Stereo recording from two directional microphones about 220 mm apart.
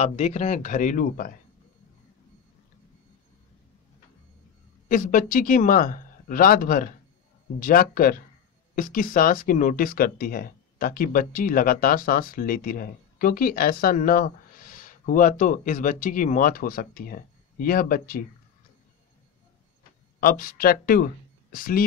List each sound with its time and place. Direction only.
0.0 s speech: 30° left (ahead or behind)
4.8 s speech: 35° left (ahead or behind)
20.2 s speech: 40° left (ahead or behind)